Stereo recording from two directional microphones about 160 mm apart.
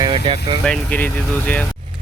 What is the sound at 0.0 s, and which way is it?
Vehicle, 30° right (ahead or behind).